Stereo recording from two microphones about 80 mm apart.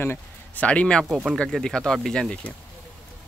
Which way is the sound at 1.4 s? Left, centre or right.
Centre.